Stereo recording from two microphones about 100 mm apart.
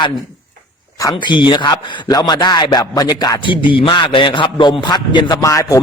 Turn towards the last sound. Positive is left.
turn(degrees=35)  # may be behind; listen again after turning